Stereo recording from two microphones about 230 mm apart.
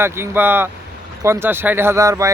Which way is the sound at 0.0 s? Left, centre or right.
Centre.